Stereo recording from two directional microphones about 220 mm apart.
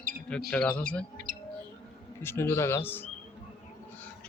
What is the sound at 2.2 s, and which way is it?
Speech, 10° left (ahead or behind).